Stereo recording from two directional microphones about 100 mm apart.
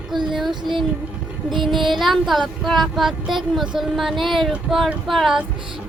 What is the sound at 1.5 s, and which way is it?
Child singing, centre (ahead or behind).